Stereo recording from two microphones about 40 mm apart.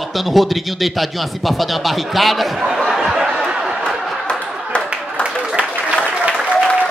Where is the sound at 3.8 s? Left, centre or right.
Left.